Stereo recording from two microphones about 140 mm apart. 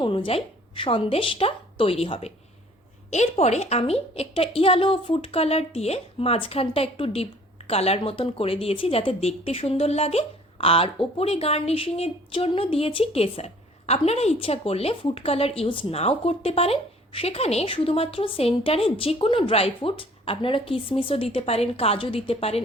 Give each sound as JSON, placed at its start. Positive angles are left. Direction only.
{"t": 0.0, "sound": "a woman's voice", "side_deg": 35}